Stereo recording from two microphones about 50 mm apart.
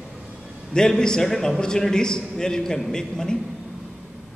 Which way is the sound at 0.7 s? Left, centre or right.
Centre.